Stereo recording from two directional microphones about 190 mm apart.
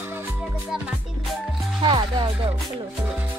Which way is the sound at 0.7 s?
5° right (ahead or behind).